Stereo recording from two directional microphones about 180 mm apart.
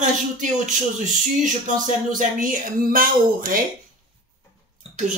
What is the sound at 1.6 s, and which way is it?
Speech, 45° right (ahead or behind).